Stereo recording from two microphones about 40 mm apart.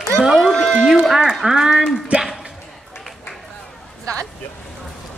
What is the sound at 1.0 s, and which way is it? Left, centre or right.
Speech, centre.